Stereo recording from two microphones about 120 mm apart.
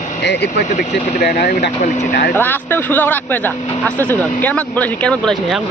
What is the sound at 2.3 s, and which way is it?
Speech, 15° left (ahead or behind).